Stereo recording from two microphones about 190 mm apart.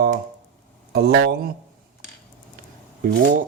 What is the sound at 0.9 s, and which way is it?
Speech, 55° right (ahead or behind).